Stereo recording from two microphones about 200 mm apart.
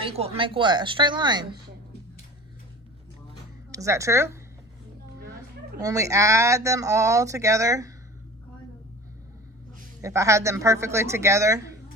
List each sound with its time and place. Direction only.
0.0 s speech: 30° right (ahead or behind)
3.7 s speech: 15° right (ahead or behind)
5.8 s speech: 15° right (ahead or behind)
10.0 s speech: 15° right (ahead or behind)